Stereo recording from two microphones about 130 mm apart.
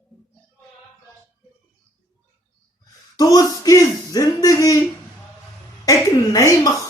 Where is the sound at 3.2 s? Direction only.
25° left (ahead or behind).